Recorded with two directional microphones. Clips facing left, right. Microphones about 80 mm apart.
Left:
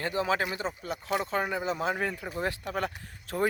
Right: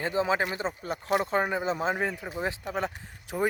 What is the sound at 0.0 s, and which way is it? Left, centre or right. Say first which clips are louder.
Speech: right 2 dB; right.